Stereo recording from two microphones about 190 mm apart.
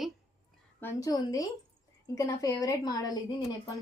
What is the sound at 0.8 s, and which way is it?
A woman's voice, 20° left (ahead or behind).